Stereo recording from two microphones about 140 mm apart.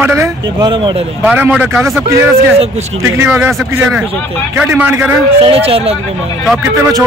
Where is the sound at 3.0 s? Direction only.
15° right (ahead or behind).